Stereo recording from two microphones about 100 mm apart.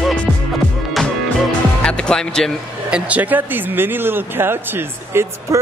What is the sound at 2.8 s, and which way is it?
Speech, 10° right (ahead or behind).